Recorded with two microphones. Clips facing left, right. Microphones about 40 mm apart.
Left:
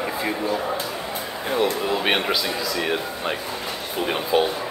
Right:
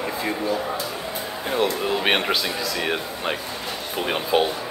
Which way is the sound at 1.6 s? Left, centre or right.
Right.